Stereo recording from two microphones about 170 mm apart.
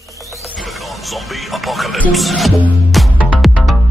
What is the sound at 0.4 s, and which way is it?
Music, centre (ahead or behind).